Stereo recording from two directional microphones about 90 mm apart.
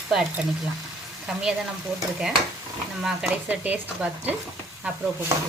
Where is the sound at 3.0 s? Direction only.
5° right (ahead or behind).